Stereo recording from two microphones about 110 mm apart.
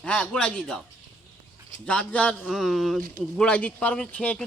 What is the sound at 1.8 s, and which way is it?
A man's voice, 10° left (ahead or behind).